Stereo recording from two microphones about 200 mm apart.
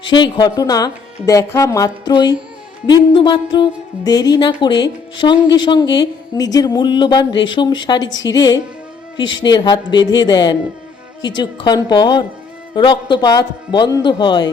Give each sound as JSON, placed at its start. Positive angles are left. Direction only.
{"t": 0.2, "sound": "a woman's voice", "side_deg": 20}